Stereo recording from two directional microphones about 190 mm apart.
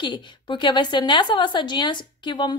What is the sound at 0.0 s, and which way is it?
Speech, 25° left (ahead or behind).